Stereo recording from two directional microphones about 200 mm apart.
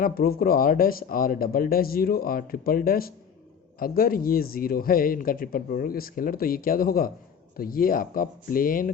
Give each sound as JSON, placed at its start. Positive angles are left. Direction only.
{"t": 0.0, "sound": "speech", "side_deg": 50}